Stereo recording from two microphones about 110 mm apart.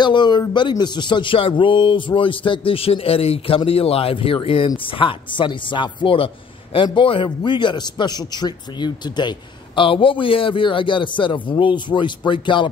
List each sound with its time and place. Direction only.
0.0 s a man's voice: 45° left (ahead or behind)